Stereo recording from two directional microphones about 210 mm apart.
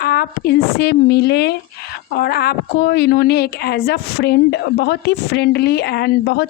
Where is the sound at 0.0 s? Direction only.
45° left (ahead or behind).